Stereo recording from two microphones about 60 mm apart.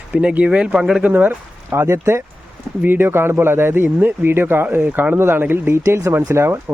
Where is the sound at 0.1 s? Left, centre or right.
Centre.